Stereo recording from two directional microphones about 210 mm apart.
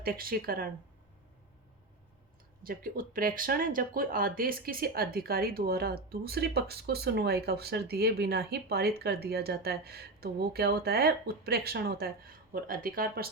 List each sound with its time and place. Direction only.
0.0 s speech: 45° right (ahead or behind)
2.6 s speech: 40° right (ahead or behind)